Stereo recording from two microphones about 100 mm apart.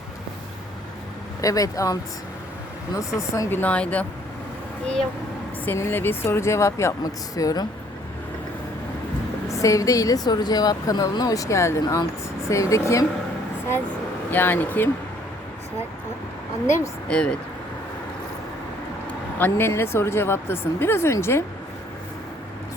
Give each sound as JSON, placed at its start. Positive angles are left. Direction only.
{"t": 1.4, "sound": "a woman's voice", "side_deg": 35}
{"t": 3.2, "sound": "a woman's voice", "side_deg": 35}
{"t": 3.5, "sound": "speech", "side_deg": 15}
{"t": 5.6, "sound": "a woman's voice", "side_deg": 25}
{"t": 9.5, "sound": "a woman's voice", "side_deg": 30}
{"t": 14.3, "sound": "speech", "side_deg": 20}
{"t": 17.1, "sound": "speech", "side_deg": 10}
{"t": 19.4, "sound": "speech", "side_deg": 25}